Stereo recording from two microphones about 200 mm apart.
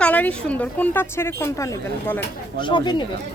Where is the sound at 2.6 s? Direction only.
25° left (ahead or behind).